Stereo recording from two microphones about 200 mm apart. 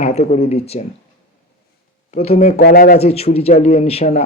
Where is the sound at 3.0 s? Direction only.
30° left (ahead or behind).